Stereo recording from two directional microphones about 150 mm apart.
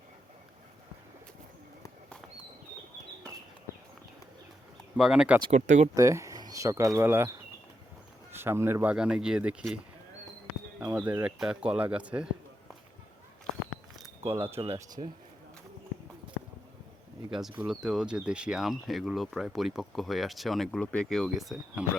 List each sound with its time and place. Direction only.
4.9 s speech: 5° right (ahead or behind)
5.5 s speech: 55° right (ahead or behind)
5.9 s speech: 20° right (ahead or behind)
10.9 s speech: 10° right (ahead or behind)
14.3 s speech: 15° right (ahead or behind)
14.7 s speech: 25° right (ahead or behind)
17.7 s speech: 5° right (ahead or behind)